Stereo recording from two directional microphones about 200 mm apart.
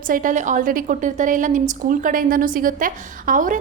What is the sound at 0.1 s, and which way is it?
A woman's voice, 40° right (ahead or behind).